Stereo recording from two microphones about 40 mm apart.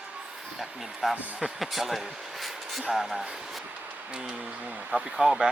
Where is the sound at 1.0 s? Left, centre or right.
Centre.